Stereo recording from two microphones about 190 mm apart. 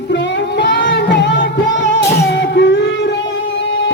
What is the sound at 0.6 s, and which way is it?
Music, 65° left (ahead or behind).